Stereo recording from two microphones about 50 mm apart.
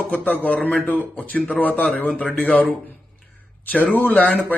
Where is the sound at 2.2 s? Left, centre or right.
Left.